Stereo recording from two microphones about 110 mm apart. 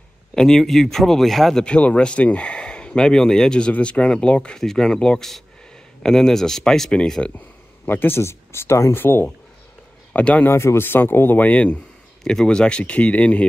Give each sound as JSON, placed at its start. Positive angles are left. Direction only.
{"t": 0.3, "sound": "speech", "side_deg": 5}
{"t": 7.8, "sound": "speech", "side_deg": 20}
{"t": 10.5, "sound": "speech", "side_deg": 25}